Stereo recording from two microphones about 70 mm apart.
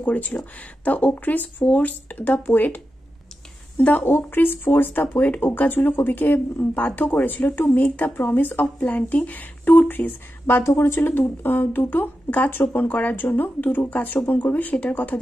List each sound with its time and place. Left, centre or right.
0.0 s speech: left